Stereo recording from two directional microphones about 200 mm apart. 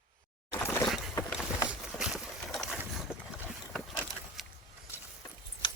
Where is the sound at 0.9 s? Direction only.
Centre (ahead or behind).